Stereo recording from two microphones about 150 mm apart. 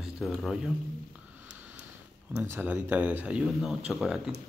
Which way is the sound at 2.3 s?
15° right (ahead or behind).